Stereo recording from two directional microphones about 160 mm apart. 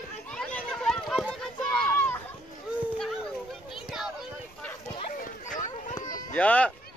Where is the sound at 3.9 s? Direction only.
5° right (ahead or behind).